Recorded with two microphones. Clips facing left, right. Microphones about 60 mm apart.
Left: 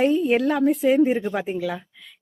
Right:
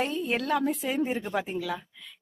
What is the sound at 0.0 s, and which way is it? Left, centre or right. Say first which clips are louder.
A woman's voice: left 10 dB; centre.